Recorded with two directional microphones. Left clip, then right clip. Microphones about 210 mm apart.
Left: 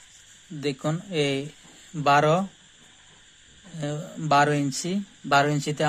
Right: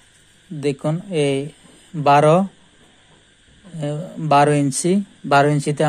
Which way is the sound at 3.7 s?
10° right (ahead or behind).